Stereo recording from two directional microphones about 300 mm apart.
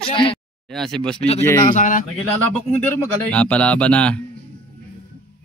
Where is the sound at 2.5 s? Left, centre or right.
Centre.